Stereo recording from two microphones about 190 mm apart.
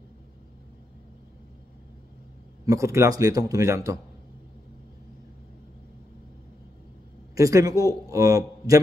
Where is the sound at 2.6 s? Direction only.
15° right (ahead or behind).